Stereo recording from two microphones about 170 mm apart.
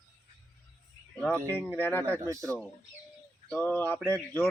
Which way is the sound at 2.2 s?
20° right (ahead or behind).